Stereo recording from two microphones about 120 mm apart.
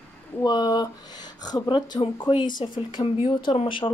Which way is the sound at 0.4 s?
35° left (ahead or behind).